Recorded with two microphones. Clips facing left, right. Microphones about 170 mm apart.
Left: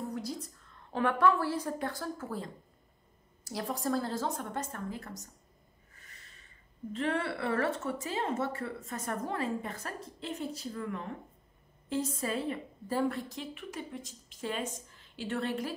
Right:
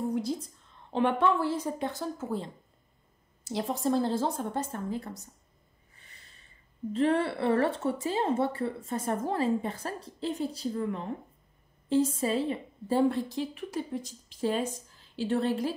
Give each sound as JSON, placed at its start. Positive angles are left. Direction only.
{"t": 0.4, "sound": "a woman's voice", "side_deg": -20}
{"t": 6.1, "sound": "a sound", "side_deg": -30}
{"t": 6.9, "sound": "a woman's voice", "side_deg": -35}